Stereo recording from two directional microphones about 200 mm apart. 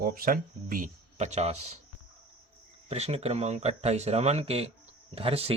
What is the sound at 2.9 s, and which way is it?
Speech, 30° right (ahead or behind).